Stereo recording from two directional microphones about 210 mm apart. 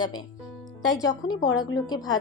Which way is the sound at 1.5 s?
20° left (ahead or behind).